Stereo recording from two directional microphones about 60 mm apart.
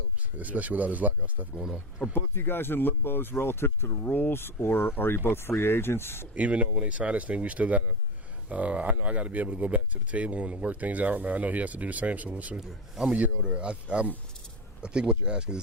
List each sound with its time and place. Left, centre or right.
0.3 s speech: right
2.0 s speech: left
4.0 s speech: left
6.3 s speech: right
12.5 s speech: centre
13.4 s speech: centre